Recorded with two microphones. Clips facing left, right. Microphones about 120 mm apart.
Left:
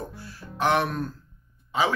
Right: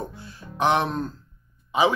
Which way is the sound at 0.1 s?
20° right (ahead or behind).